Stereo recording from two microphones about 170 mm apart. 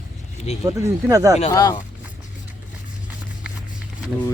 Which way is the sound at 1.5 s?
25° left (ahead or behind).